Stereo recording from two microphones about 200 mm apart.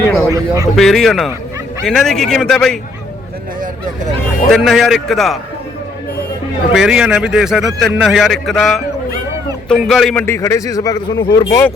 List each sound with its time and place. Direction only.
0.3 s speech: 15° right (ahead or behind)
0.8 s a man's voice: centre (ahead or behind)
4.5 s a man's voice: centre (ahead or behind)
6.7 s a man's voice: 5° right (ahead or behind)
10.2 s speech: 15° left (ahead or behind)